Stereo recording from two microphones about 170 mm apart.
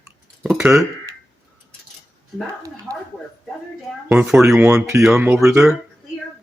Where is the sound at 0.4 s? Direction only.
5° right (ahead or behind).